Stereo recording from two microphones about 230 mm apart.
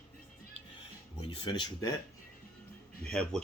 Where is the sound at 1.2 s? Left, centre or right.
Left.